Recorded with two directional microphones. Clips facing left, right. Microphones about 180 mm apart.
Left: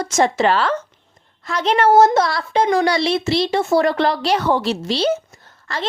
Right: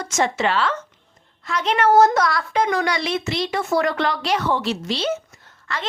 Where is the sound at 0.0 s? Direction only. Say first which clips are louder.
Left 5 dB; 35° left (ahead or behind).